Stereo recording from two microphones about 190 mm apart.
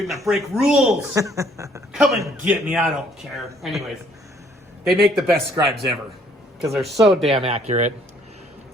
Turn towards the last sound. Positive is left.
turn(degrees=-35)  # may be behind; listen again after turning